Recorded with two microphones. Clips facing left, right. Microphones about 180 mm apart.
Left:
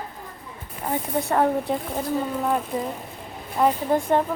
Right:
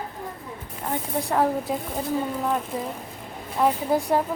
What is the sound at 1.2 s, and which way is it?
Speech, centre (ahead or behind).